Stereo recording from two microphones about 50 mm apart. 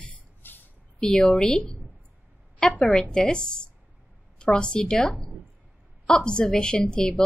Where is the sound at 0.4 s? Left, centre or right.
Left.